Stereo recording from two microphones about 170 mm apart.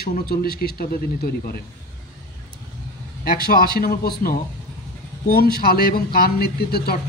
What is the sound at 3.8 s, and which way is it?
Speech, 60° left (ahead or behind).